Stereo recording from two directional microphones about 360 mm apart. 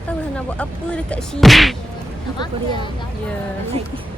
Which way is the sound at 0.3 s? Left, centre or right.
Centre.